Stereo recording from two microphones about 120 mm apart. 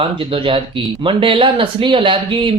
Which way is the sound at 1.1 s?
45° right (ahead or behind).